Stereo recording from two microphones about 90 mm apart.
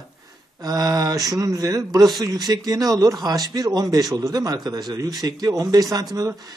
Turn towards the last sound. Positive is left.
turn(degrees=-45)  # may be behind; listen again after turning